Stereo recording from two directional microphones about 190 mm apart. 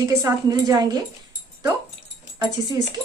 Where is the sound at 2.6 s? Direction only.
20° right (ahead or behind).